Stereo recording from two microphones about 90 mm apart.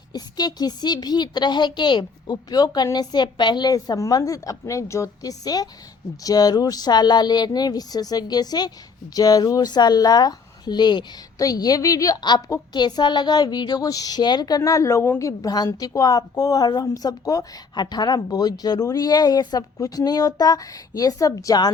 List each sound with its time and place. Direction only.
0.1 s a woman's voice: 50° left (ahead or behind)
11.3 s a woman's voice: 45° left (ahead or behind)
12.7 s a woman's voice: 55° left (ahead or behind)